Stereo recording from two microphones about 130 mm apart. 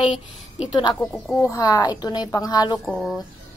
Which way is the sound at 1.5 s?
30° left (ahead or behind).